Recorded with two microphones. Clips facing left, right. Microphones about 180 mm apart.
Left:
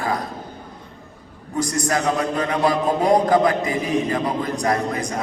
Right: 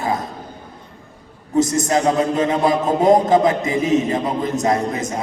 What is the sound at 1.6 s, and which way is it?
A man's voice, 20° right (ahead or behind).